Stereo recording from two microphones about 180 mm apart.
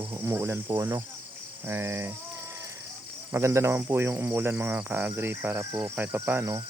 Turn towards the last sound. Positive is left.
turn(degrees=-15)  # may be behind; listen again after turning